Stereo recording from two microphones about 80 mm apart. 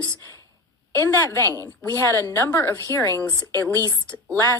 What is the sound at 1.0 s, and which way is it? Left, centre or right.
Speech, left.